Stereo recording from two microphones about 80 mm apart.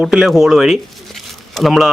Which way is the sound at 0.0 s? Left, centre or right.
Centre.